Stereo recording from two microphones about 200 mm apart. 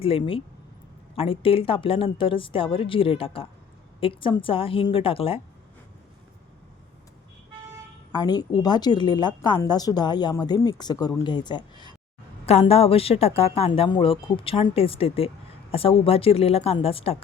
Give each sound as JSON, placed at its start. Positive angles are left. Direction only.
{"t": 0.0, "sound": "a woman's voice", "side_deg": 25}
{"t": 8.1, "sound": "a woman's voice", "side_deg": 20}